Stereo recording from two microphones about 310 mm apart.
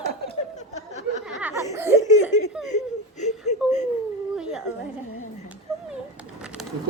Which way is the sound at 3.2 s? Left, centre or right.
Left.